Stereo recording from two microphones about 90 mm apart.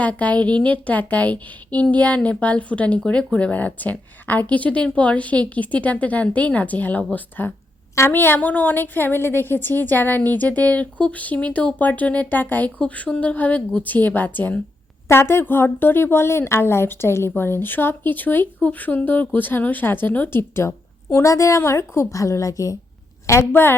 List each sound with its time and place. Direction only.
0.0 s a woman's voice: 15° left (ahead or behind)
15.0 s a woman's voice: 30° left (ahead or behind)